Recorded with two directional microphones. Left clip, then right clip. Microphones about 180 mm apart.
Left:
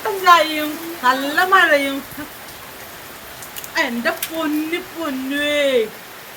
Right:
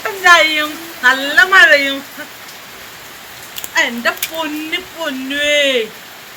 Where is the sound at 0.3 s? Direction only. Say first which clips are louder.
Right 4 dB; 15° left (ahead or behind).